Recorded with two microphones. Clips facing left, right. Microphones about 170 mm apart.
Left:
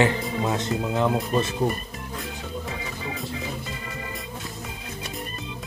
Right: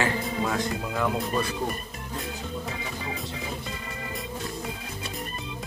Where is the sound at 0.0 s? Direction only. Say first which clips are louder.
Left 4 dB; 20° left (ahead or behind).